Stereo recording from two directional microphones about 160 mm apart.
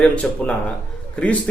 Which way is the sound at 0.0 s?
5° left (ahead or behind).